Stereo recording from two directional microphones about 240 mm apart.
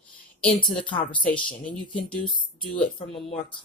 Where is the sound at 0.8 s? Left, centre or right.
Centre.